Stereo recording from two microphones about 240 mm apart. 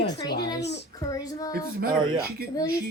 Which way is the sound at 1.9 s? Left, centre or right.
Centre.